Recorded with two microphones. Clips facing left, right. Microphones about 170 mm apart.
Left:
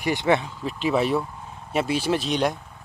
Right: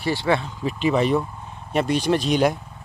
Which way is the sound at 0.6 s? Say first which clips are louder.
Right 2 dB; centre (ahead or behind).